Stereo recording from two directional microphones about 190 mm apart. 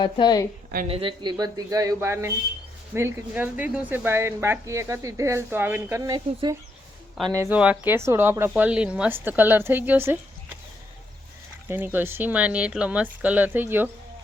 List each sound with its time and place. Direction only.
0.0 s a woman's voice: 20° left (ahead or behind)
0.9 s speech: 30° right (ahead or behind); by 10.6 s 10° right (ahead or behind)
11.7 s speech: 10° right (ahead or behind)